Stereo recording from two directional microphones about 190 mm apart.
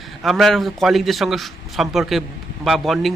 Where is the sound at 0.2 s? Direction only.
Centre (ahead or behind).